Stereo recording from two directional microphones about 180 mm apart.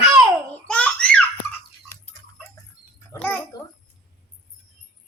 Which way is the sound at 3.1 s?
20° left (ahead or behind).